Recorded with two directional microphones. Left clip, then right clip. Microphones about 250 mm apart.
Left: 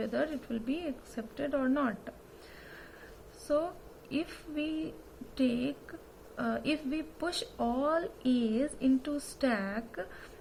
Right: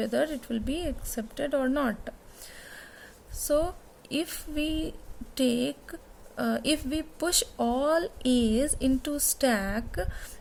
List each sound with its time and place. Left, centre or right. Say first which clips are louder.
0.0 s speech: right 5 dB; right
3.4 s speech: right 5 dB; right